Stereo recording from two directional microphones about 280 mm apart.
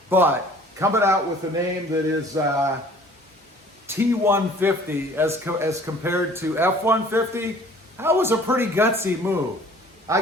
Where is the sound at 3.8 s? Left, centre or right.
Centre.